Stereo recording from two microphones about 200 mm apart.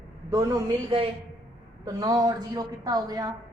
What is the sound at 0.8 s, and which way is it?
Speech, 30° right (ahead or behind).